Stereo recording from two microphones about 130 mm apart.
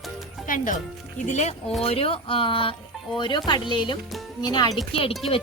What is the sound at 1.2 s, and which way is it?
Speech, 65° left (ahead or behind).